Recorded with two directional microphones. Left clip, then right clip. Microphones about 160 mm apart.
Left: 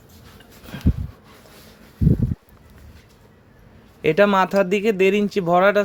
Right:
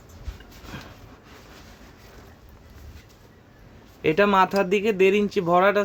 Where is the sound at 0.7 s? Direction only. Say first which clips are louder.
Left 12 dB; 30° left (ahead or behind).